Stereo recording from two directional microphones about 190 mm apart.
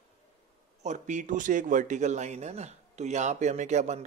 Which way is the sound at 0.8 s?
40° right (ahead or behind).